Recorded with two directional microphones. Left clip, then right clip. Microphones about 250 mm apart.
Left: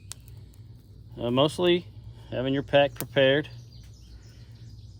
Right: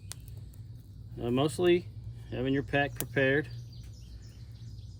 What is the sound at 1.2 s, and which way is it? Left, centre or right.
Speech, left.